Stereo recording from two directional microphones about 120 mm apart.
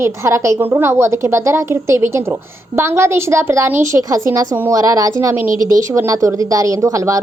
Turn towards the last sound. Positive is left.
turn(degrees=-25)  # may be behind; listen again after turning